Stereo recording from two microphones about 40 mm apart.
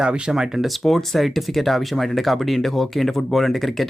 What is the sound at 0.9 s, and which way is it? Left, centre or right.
Speech, centre.